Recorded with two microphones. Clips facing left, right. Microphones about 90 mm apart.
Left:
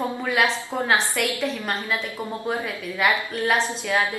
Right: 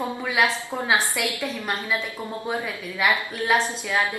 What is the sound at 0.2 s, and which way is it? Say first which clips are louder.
A woman's voice: even; 5° right (ahead or behind).